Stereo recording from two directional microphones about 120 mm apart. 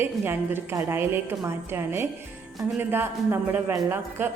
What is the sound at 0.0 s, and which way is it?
A woman's voice, 20° right (ahead or behind).